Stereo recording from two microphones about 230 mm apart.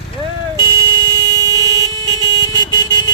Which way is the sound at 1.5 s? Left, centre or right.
Centre.